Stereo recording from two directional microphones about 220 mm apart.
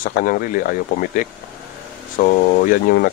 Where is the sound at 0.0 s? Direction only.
40° left (ahead or behind).